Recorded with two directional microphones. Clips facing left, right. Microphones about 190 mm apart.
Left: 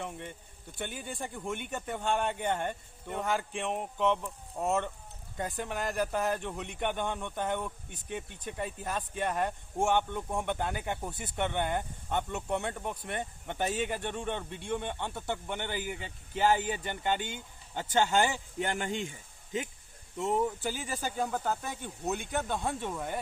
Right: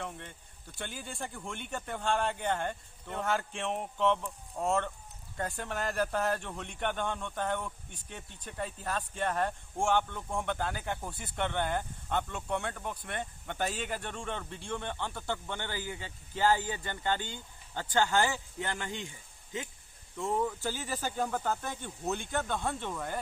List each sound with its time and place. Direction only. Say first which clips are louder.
0.0 s speech: left 2 dB; 15° left (ahead or behind)
5.4 s speech: left 1 dB; 15° left (ahead or behind)
20.1 s speech: left 2 dB; 20° left (ahead or behind); by 22.3 s centre (ahead or behind)
22.3 s speech: left 1 dB; 15° left (ahead or behind)
22.6 s speech: left 1 dB; centre (ahead or behind)